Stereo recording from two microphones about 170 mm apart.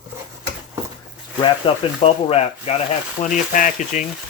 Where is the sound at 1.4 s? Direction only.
35° left (ahead or behind).